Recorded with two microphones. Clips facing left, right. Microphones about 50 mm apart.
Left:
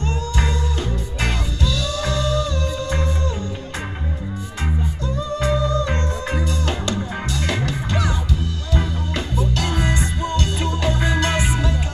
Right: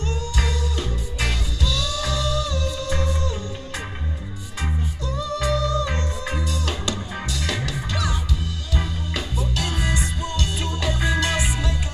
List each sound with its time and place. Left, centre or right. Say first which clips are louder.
0.0 s music: left 3 dB; left
5.0 s music: left 2 dB; left
9.4 s music: left 5 dB; left